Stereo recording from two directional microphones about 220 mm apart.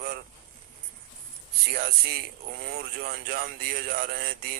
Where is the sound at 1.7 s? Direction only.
40° right (ahead or behind).